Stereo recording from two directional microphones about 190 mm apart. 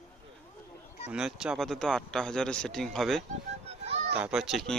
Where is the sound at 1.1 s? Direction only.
5° right (ahead or behind).